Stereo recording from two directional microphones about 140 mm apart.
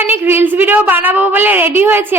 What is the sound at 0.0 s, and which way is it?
A woman's voice, 15° right (ahead or behind).